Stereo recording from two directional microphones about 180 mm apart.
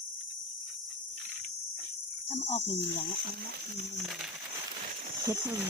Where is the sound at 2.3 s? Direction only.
35° left (ahead or behind).